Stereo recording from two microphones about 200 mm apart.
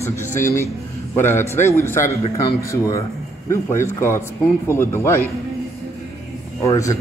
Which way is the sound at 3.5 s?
15° left (ahead or behind).